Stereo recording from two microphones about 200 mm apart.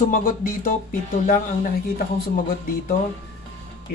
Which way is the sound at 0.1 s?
45° left (ahead or behind).